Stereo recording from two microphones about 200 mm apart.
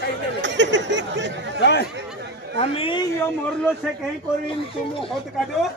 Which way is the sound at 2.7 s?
25° left (ahead or behind).